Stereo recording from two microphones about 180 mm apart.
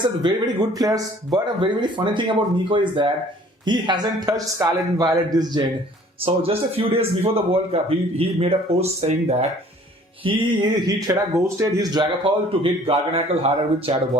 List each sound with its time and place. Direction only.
0.2 s speech: 20° right (ahead or behind)
6.2 s a man's voice: 35° right (ahead or behind)